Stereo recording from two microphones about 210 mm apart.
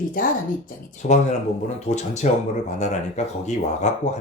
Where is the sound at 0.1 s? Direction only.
40° left (ahead or behind).